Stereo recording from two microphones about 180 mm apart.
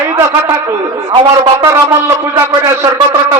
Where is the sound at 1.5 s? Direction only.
20° right (ahead or behind).